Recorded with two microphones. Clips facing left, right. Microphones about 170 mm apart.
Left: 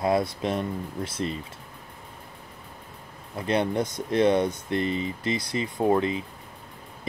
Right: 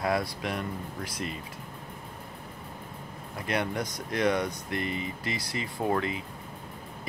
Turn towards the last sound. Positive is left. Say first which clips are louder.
# left 6 dB
turn(degrees=25)  # may be behind; listen again after turning